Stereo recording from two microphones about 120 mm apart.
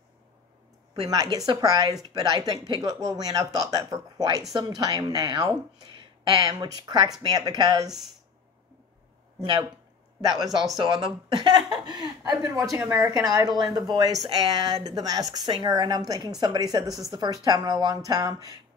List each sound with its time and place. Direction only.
1.0 s a woman's voice: 35° right (ahead or behind)
9.4 s speech: 40° right (ahead or behind)
10.8 s a woman's voice: 40° right (ahead or behind)
12.7 s speech: 15° right (ahead or behind)
13.1 s a woman's voice: 30° right (ahead or behind)